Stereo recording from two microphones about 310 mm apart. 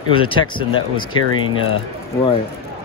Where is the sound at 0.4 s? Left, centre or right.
Centre.